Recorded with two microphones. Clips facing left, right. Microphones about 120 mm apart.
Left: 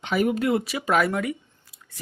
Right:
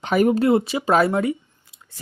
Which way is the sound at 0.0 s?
45° right (ahead or behind).